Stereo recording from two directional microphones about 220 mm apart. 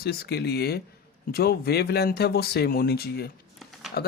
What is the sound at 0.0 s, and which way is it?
Speech, 45° left (ahead or behind).